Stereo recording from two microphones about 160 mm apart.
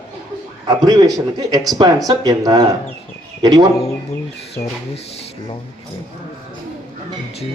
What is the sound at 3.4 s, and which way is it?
Speech, 25° right (ahead or behind).